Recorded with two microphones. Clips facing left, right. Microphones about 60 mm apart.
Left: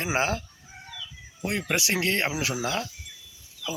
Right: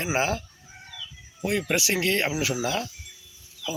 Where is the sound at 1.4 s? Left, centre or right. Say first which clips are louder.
Right 2 dB; left.